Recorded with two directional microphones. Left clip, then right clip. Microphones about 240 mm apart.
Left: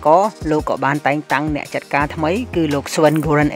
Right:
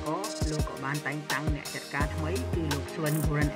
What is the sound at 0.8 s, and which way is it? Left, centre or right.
Speech, left.